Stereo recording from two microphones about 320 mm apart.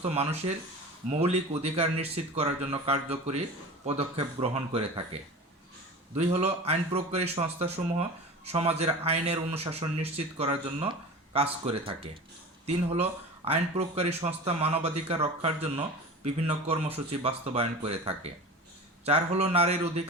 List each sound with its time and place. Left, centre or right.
0.0 s speech: centre
6.1 s speech: centre